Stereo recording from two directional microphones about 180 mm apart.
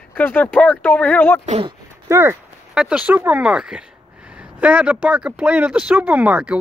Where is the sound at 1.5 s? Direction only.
30° right (ahead or behind).